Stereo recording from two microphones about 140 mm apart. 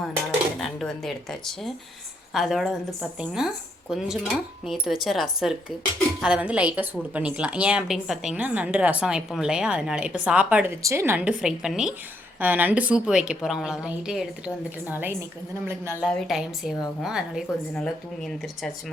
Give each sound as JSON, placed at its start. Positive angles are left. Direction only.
{"t": 0.6, "sound": "a woman's voice", "side_deg": 0}
{"t": 16.0, "sound": "a woman's voice", "side_deg": 5}